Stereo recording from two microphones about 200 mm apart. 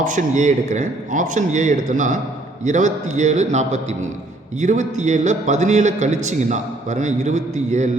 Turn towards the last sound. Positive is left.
turn(degrees=-35)  # may be behind; listen again after turning